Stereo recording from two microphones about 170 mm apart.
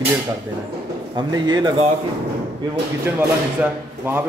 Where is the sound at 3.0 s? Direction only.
10° right (ahead or behind).